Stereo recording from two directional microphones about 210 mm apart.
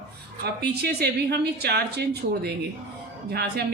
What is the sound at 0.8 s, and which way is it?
Speech, 50° right (ahead or behind).